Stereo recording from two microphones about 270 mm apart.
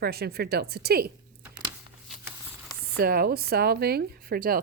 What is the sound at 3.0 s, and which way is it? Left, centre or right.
Speech, right.